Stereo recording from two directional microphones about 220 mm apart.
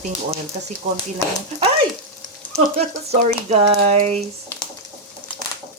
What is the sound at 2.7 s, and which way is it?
Speech, 30° right (ahead or behind).